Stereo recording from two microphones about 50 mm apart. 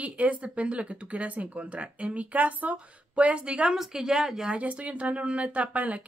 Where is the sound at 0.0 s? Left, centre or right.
Right.